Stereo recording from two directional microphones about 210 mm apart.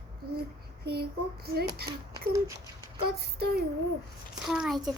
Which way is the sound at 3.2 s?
45° right (ahead or behind).